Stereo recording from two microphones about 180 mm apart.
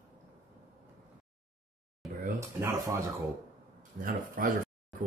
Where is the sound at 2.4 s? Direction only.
15° right (ahead or behind).